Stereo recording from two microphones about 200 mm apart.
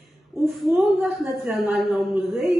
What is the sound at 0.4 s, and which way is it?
A woman's voice, centre (ahead or behind).